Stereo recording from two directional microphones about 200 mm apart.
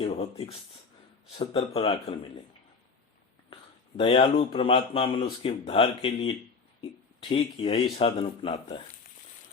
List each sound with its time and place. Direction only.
0.0 s a sound: 30° left (ahead or behind)
1.4 s speech: 30° left (ahead or behind)
3.5 s speech: 25° left (ahead or behind)